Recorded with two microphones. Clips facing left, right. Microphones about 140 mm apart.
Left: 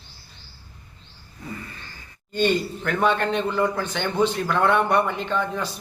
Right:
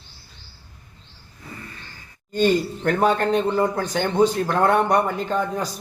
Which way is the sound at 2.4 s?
40° right (ahead or behind).